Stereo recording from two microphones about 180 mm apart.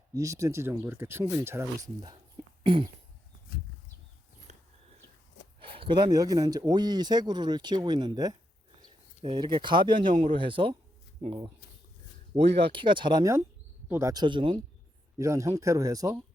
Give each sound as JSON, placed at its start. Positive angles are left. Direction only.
{"t": 0.1, "sound": "speech", "side_deg": -15}
{"t": 4.5, "sound": "a sound", "side_deg": -40}
{"t": 5.5, "sound": "speech", "side_deg": -30}
{"t": 12.3, "sound": "speech", "side_deg": -30}
{"t": 15.2, "sound": "speech", "side_deg": -15}